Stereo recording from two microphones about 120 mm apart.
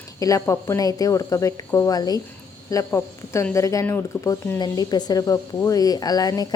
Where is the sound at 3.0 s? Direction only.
20° left (ahead or behind).